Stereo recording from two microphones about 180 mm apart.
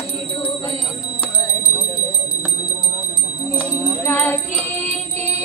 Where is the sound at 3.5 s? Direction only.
5° left (ahead or behind).